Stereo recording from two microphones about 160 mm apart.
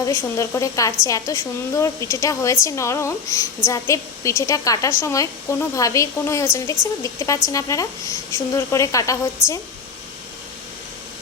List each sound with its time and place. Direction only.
0.0 s a woman's voice: 20° left (ahead or behind)
9.4 s a woman's voice: 5° right (ahead or behind)